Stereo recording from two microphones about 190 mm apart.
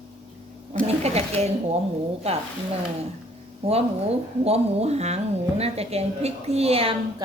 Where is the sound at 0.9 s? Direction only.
35° right (ahead or behind).